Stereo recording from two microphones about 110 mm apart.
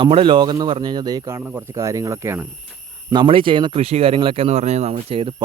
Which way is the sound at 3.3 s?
50° right (ahead or behind).